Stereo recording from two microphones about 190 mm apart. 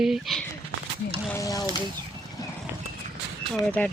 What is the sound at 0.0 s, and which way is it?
Speech, centre (ahead or behind).